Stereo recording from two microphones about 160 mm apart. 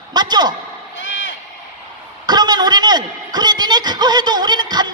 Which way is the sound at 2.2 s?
25° right (ahead or behind).